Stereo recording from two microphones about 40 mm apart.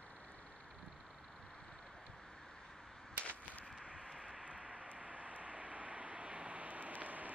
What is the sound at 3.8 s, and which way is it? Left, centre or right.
Vehicle, right.